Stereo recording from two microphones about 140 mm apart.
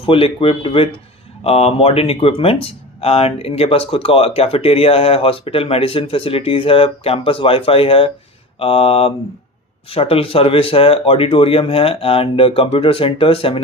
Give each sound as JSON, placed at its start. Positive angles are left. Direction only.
{"t": 0.0, "sound": "speech", "side_deg": 40}